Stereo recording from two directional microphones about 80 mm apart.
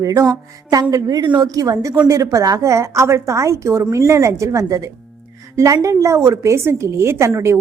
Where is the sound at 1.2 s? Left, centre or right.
Right.